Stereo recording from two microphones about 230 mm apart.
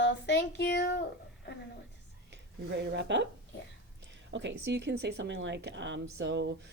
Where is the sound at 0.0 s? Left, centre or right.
Left.